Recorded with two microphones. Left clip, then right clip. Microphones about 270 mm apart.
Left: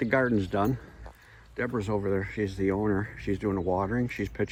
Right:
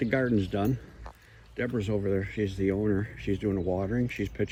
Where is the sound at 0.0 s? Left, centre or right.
Centre.